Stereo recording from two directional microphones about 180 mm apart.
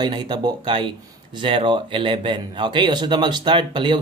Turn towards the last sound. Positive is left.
turn(degrees=-25)  # may be behind; listen again after turning